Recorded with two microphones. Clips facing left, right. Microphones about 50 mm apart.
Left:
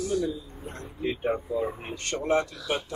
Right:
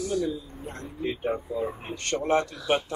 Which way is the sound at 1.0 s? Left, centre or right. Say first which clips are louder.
Left 1 dB; centre.